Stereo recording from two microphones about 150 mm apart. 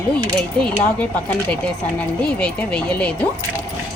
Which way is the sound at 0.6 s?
10° left (ahead or behind).